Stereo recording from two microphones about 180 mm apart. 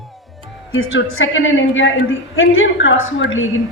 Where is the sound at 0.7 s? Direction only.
90° left.